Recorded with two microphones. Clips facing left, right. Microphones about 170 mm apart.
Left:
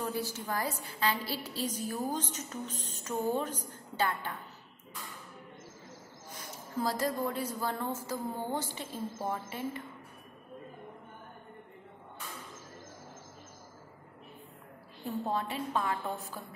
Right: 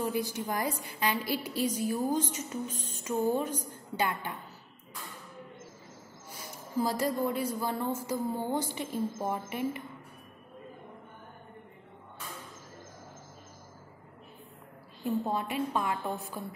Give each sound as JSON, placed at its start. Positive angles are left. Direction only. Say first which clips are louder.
{"t": 0.0, "sound": "a woman's voice", "louder": "right 4 dB", "side_deg": -15}
{"t": 6.8, "sound": "a woman's voice", "louder": "right 2 dB", "side_deg": -10}
{"t": 15.2, "sound": "a woman's voice", "louder": "right 2 dB", "side_deg": -10}